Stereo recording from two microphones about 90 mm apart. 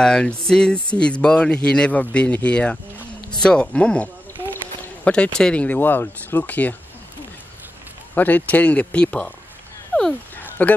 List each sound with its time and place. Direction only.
0.0 s speech: 10° left (ahead or behind)
8.1 s speech: 20° left (ahead or behind)
10.6 s speech: 15° left (ahead or behind)